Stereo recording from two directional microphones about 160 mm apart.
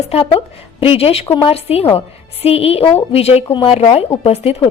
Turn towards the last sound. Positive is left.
turn(degrees=40)  # may be behind; listen again after turning